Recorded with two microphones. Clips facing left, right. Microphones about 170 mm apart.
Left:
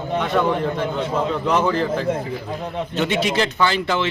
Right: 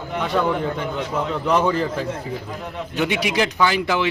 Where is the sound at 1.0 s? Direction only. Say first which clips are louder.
Left 3 dB; 30° left (ahead or behind).